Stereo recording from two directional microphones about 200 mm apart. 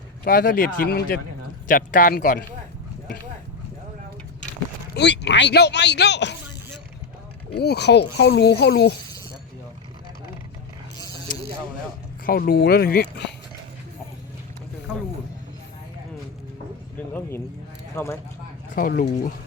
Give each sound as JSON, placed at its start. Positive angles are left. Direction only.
{"t": 0.3, "sound": "speech", "side_deg": 45}
{"t": 4.9, "sound": "speech", "side_deg": 60}
{"t": 7.6, "sound": "speech", "side_deg": 55}
{"t": 12.2, "sound": "speech", "side_deg": 50}
{"t": 17.9, "sound": "speech", "side_deg": 15}
{"t": 18.7, "sound": "speech", "side_deg": 45}